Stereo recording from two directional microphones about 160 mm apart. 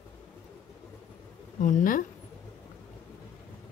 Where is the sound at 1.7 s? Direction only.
55° left (ahead or behind).